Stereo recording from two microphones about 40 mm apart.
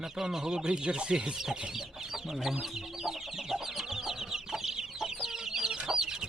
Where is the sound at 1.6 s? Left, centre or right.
Centre.